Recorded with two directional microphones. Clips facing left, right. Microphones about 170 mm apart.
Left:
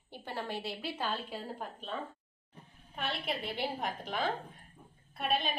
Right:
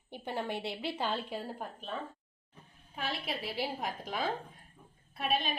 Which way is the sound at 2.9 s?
Centre (ahead or behind).